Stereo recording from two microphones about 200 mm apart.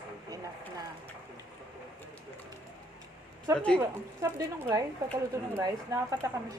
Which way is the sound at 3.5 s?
5° left (ahead or behind).